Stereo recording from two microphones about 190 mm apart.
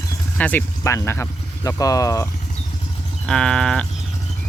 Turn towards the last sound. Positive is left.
turn(degrees=5)  # may be behind; listen again after turning